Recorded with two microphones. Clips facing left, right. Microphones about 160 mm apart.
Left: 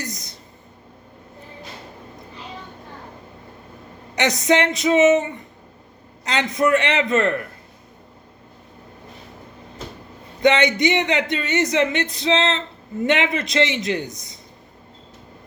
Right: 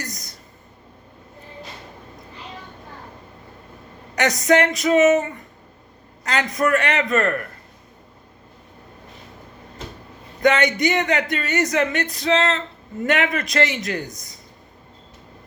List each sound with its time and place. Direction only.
0.0 s a sound: 25° left (ahead or behind)
4.1 s speech: 20° left (ahead or behind)
10.4 s speech: 20° left (ahead or behind)